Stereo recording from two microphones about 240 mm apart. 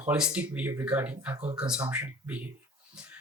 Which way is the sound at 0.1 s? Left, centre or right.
Centre.